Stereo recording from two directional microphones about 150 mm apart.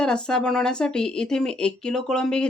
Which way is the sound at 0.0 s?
5° left (ahead or behind).